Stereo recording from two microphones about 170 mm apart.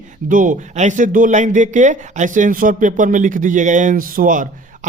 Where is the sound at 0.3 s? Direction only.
50° right (ahead or behind).